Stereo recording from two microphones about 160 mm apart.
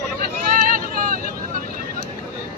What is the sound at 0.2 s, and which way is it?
Vehicle, 60° right (ahead or behind).